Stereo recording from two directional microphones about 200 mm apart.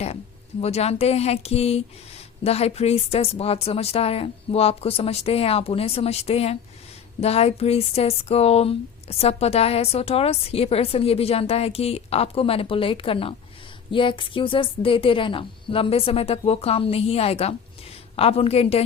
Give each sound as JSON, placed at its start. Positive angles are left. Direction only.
{"t": 0.6, "sound": "speech", "side_deg": 30}